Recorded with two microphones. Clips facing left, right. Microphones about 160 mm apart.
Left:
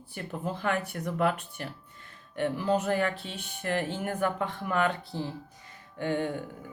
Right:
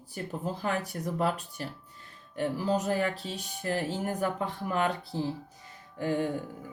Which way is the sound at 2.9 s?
35° right (ahead or behind).